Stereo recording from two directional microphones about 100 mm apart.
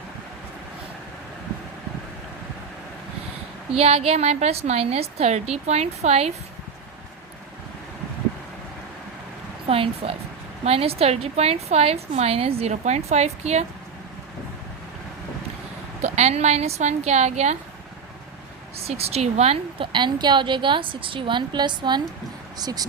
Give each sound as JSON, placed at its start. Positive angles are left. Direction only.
{"t": 3.8, "sound": "a woman's voice", "side_deg": -85}
{"t": 9.6, "sound": "a woman's voice", "side_deg": -70}
{"t": 10.7, "sound": "a woman's voice", "side_deg": -80}
{"t": 16.1, "sound": "a woman's voice", "side_deg": -90}
{"t": 18.8, "sound": "a woman's voice", "side_deg": -90}
{"t": 19.9, "sound": "a woman's voice", "side_deg": -50}